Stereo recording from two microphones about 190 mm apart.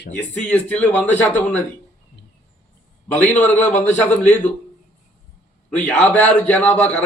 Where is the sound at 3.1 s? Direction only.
10° left (ahead or behind).